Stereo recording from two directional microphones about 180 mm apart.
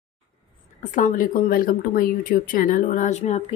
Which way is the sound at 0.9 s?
45° left (ahead or behind).